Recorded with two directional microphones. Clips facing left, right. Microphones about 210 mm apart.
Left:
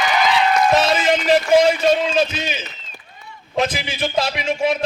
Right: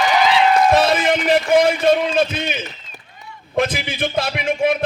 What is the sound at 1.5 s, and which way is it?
A man's voice, 55° right (ahead or behind).